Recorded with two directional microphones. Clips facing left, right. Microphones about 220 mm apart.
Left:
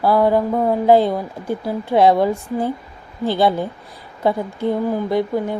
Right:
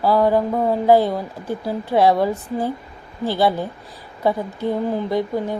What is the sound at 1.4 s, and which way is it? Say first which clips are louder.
Speech: left 2 dB; 15° left (ahead or behind).